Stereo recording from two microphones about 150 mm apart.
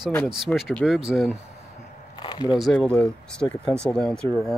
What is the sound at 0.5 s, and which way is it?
Speech, 10° left (ahead or behind).